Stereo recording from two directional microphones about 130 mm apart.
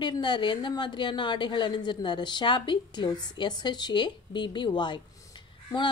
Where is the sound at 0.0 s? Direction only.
35° left (ahead or behind).